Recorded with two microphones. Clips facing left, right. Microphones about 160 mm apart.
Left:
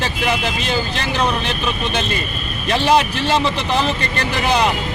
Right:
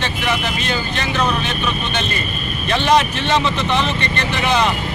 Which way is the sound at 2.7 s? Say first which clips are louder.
Even; 35° left (ahead or behind).